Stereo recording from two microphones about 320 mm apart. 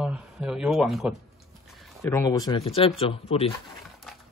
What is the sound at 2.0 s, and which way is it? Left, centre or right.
Speech, centre.